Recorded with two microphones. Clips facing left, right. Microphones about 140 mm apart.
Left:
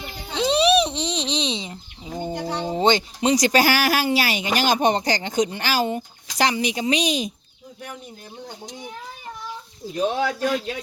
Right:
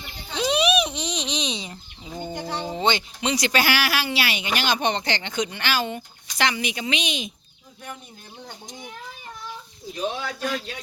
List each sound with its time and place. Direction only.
0.3 s chicken: 30° left (ahead or behind)
2.6 s speech: 35° left (ahead or behind)
9.9 s speech: 45° left (ahead or behind)